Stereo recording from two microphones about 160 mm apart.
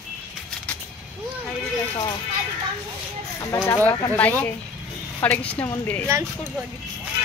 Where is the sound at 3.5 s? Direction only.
15° left (ahead or behind).